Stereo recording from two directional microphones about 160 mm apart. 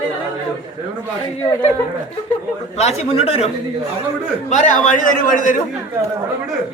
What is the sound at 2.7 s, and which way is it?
Speech, 40° left (ahead or behind).